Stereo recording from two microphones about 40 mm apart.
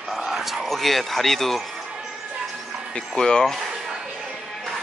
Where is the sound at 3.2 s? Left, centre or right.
Centre.